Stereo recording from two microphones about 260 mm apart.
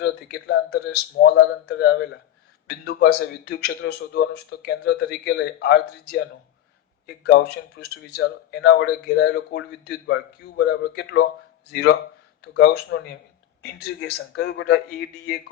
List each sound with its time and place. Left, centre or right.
0.0 s speech: left
7.3 s speech: left